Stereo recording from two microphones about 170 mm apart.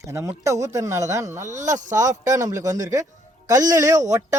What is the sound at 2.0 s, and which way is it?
Speech, 20° right (ahead or behind).